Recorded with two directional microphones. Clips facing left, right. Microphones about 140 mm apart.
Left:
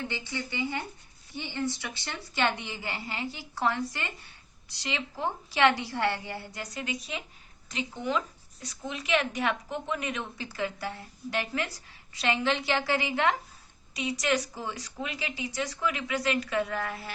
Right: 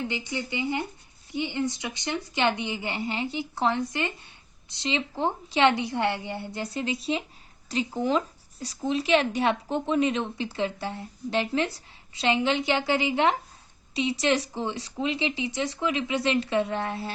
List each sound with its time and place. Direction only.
0.1 s speech: 15° right (ahead or behind)